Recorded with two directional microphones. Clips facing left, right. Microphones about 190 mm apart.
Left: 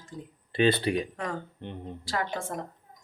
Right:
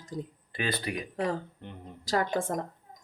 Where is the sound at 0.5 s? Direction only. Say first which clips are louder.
Left 9 dB; 30° left (ahead or behind).